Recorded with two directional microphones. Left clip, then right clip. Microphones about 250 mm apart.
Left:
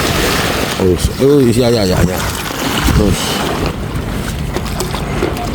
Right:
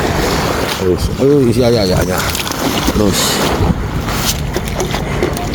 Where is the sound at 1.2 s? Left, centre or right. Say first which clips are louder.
Left 1 dB; centre.